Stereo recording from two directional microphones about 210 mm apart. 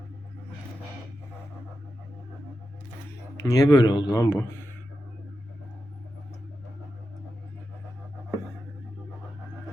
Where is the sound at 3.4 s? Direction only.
15° left (ahead or behind).